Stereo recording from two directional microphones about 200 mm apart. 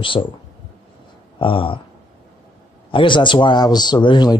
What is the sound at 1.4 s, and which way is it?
Speech, 25° left (ahead or behind).